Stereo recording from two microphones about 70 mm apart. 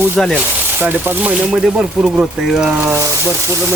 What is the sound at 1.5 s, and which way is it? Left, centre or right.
Speech, centre.